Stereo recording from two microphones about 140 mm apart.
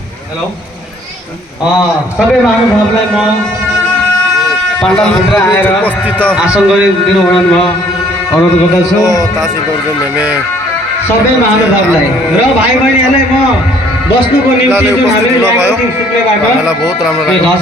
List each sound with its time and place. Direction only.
4.8 s speech: 5° left (ahead or behind)
6.3 s a man's voice: 10° right (ahead or behind)
9.0 s music: 25° left (ahead or behind)
16.6 s speech: centre (ahead or behind)